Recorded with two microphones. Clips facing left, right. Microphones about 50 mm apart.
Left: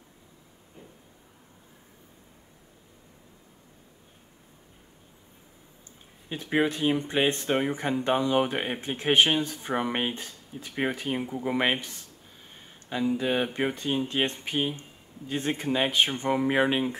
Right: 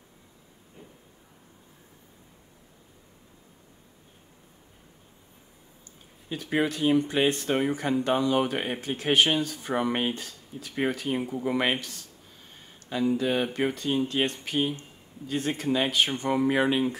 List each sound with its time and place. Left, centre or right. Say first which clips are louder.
6.2 s speech: left 1 dB; left
10.1 s speech: even; left
10.7 s speech: right 1 dB; centre
11.5 s speech: left 1 dB; left
13.2 s speech: right 1 dB; left